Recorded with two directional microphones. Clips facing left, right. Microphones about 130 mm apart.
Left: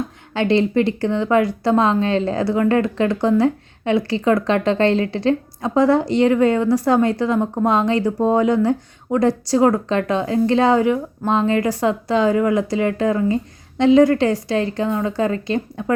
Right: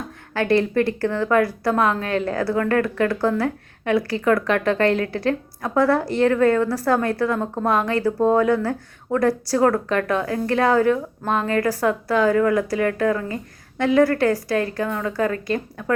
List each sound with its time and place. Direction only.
0.3 s speech: 20° left (ahead or behind)